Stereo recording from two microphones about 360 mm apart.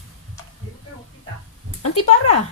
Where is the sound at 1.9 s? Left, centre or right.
Left.